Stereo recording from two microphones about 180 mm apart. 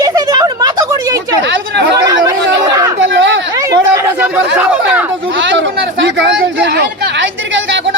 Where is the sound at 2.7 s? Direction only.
20° right (ahead or behind).